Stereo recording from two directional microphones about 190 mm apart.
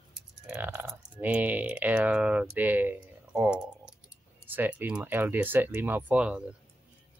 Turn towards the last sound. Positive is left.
turn(degrees=-5)  # may be behind; listen again after turning